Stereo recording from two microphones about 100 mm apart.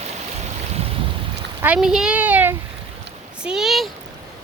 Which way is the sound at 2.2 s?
15° right (ahead or behind).